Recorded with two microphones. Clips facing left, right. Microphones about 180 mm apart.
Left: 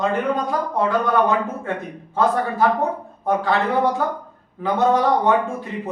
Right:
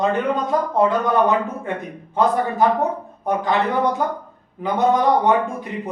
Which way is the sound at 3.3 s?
20° right (ahead or behind).